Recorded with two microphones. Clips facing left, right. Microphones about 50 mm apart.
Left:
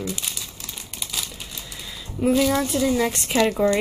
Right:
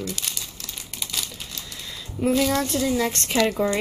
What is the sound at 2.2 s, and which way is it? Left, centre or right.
Speech, centre.